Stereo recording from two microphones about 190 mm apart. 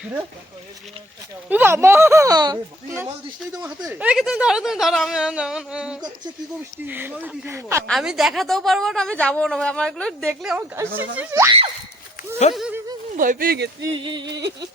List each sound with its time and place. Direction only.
1.5 s speech: 10° right (ahead or behind)
3.8 s speech: 5° right (ahead or behind)
7.9 s speech: centre (ahead or behind)
12.5 s speech: 5° right (ahead or behind)
13.1 s speech: 45° right (ahead or behind)
13.9 s speech: 25° right (ahead or behind)
14.3 s a sound: 65° right (ahead or behind)